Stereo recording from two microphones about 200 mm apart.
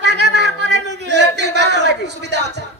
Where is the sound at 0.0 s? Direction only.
60° right (ahead or behind).